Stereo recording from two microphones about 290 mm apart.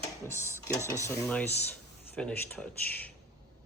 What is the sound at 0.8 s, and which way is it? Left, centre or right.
Speech, centre.